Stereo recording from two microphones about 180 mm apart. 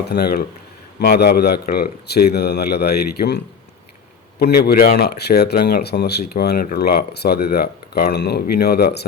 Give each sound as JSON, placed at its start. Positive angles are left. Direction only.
{"t": 0.1, "sound": "speech", "side_deg": 60}